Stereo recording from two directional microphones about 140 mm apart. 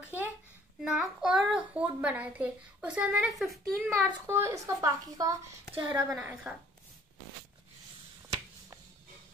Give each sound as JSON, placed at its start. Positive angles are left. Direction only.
{"t": 0.0, "sound": "a sound", "side_deg": -15}
{"t": 0.8, "sound": "a child's voice", "side_deg": -5}
{"t": 4.3, "sound": "a woman's voice", "side_deg": -20}
{"t": 5.7, "sound": "a woman's voice", "side_deg": 20}
{"t": 6.1, "sound": "a child's voice", "side_deg": -10}